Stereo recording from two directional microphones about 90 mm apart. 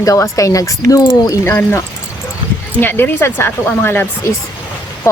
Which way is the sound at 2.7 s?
25° left (ahead or behind).